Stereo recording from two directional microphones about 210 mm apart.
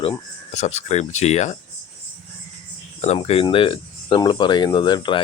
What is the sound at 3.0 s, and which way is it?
Speech, 30° left (ahead or behind).